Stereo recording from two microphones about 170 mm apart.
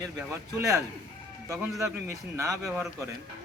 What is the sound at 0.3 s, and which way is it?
A man's voice, 20° right (ahead or behind).